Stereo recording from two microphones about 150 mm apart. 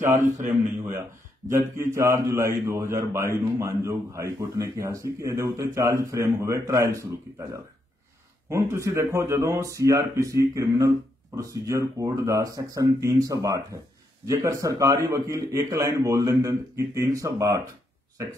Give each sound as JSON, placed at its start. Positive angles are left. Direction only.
{"t": 0.1, "sound": "a man's voice", "side_deg": -60}
{"t": 2.0, "sound": "a man's voice", "side_deg": -20}
{"t": 8.5, "sound": "a man's voice", "side_deg": -20}